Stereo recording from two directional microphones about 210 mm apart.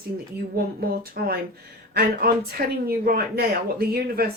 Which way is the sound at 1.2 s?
50° right (ahead or behind).